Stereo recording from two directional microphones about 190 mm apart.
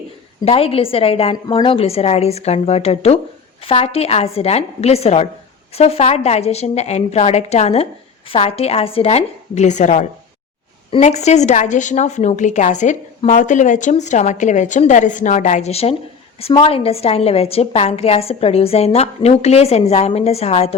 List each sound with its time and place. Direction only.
0.4 s a woman's voice: 30° left (ahead or behind)